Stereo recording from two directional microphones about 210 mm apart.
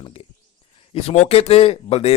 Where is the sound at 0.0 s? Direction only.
25° left (ahead or behind).